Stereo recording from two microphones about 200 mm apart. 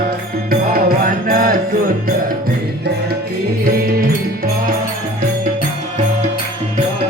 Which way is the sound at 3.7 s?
50° right (ahead or behind).